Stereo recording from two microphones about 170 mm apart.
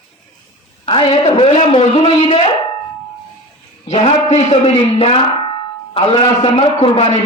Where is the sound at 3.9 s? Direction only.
35° left (ahead or behind).